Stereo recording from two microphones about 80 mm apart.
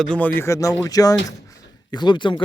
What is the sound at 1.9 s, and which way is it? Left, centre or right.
Speech, left.